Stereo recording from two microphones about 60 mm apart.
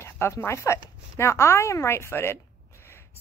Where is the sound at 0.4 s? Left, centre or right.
Left.